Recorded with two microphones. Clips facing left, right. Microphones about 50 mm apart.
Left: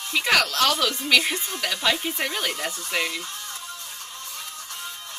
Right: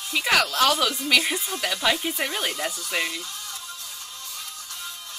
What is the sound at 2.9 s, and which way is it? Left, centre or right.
Speech, left.